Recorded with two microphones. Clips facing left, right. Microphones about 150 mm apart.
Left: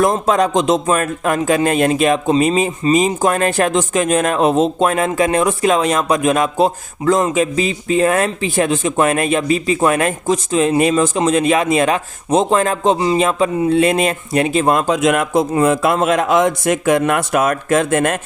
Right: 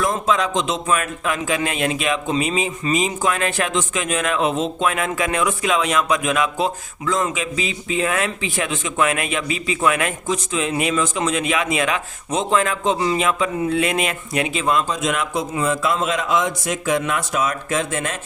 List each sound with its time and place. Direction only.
0.0 s speech: 45° left (ahead or behind)